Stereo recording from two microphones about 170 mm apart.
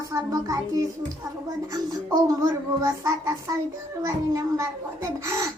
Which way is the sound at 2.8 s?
20° right (ahead or behind).